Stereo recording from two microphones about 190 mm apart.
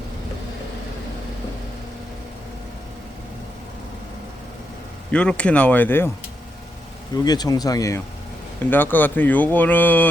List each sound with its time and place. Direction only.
5.1 s speech: 5° left (ahead or behind)
7.3 s speech: 20° left (ahead or behind)